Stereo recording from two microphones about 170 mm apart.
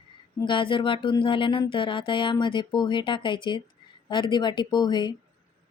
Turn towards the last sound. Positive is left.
turn(degrees=25)  # may be behind; listen again after turning